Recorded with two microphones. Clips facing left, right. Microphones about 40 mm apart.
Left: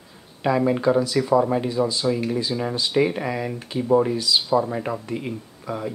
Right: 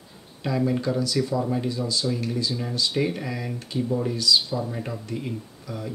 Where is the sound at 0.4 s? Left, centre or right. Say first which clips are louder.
Left 4 dB; left.